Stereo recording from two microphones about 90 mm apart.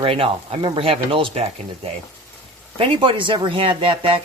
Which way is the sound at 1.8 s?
90° right.